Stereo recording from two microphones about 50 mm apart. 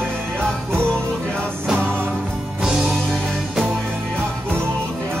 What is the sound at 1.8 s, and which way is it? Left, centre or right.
Music, right.